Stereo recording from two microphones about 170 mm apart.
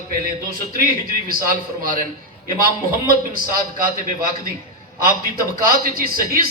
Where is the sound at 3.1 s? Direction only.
55° right (ahead or behind).